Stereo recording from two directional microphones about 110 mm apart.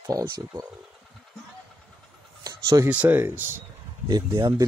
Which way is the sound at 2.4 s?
30° right (ahead or behind).